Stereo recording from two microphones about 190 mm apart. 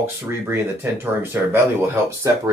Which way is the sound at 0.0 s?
15° right (ahead or behind).